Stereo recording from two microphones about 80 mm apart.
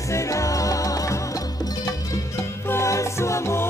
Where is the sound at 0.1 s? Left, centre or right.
Left.